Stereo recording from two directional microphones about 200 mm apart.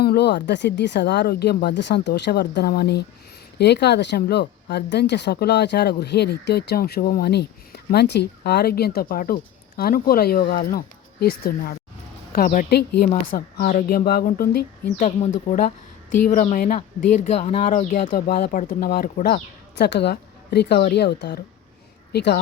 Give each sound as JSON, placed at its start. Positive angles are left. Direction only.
{"t": 0.0, "sound": "a woman's voice", "side_deg": 55}